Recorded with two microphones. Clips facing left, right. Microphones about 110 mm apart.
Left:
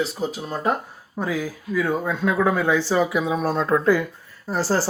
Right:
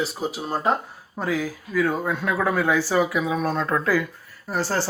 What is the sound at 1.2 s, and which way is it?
Speech, 15° left (ahead or behind).